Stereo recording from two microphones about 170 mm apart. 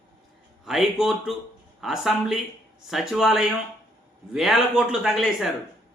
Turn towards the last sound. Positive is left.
turn(degrees=0)  # may be behind; listen again after turning